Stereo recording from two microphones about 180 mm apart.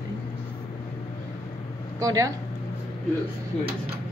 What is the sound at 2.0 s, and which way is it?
Speech, 20° right (ahead or behind).